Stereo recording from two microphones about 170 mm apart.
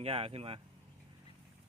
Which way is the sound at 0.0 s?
35° right (ahead or behind).